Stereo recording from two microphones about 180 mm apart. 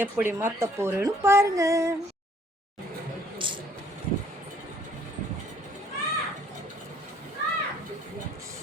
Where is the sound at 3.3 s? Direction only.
30° right (ahead or behind).